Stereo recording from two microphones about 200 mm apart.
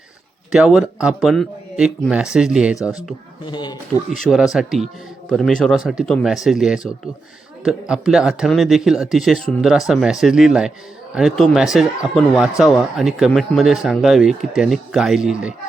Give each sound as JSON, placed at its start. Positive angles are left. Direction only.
{"t": 0.5, "sound": "speech", "side_deg": -5}
{"t": 3.4, "sound": "speech", "side_deg": 20}
{"t": 4.2, "sound": "speech", "side_deg": 0}